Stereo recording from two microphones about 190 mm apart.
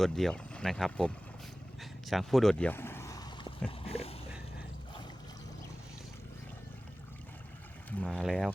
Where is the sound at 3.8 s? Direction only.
30° left (ahead or behind).